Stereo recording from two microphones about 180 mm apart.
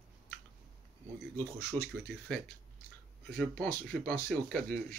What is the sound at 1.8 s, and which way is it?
Speech, 30° right (ahead or behind).